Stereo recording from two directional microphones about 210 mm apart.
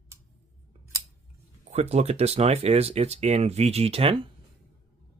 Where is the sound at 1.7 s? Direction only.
30° right (ahead or behind).